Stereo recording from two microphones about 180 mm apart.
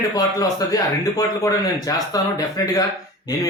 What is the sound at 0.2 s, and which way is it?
Speech, 20° left (ahead or behind).